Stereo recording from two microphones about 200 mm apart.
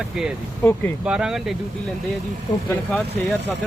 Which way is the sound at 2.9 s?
Centre (ahead or behind).